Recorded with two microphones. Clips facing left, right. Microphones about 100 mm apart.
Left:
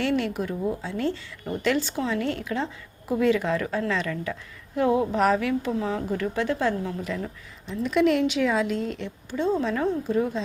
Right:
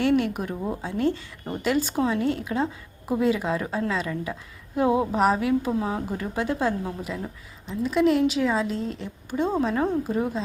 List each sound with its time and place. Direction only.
0.0 s a woman's voice: 15° right (ahead or behind)
7.8 s a woman's voice: centre (ahead or behind)
8.7 s speech: 35° right (ahead or behind)
9.8 s speech: 15° right (ahead or behind)